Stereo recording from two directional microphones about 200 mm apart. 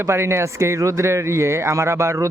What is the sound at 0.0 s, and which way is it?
A man's voice, 15° right (ahead or behind).